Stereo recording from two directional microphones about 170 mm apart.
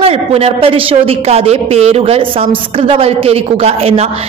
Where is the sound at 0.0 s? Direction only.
35° right (ahead or behind).